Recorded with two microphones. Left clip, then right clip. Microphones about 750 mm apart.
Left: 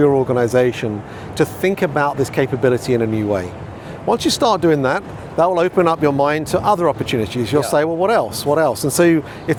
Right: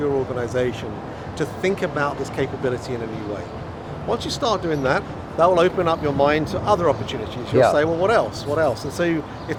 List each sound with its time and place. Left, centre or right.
0.0 s speech: left